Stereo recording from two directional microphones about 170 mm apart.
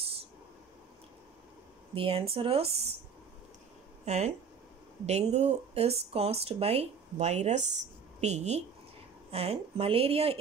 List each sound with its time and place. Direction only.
2.0 s speech: 35° right (ahead or behind)
4.0 s speech: 40° right (ahead or behind)